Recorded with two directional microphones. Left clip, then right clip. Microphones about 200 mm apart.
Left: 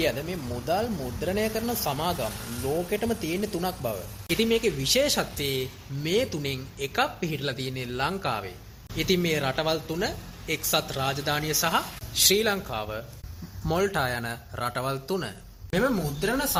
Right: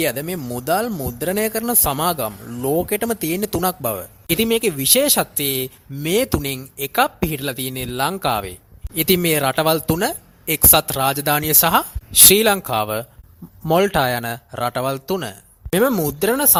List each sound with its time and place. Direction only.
0.0 s a man's voice: 50° right (ahead or behind)